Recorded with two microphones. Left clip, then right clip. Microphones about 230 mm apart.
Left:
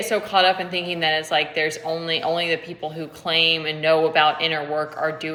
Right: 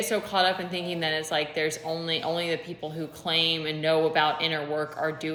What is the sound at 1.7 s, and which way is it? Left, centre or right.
Speech, centre.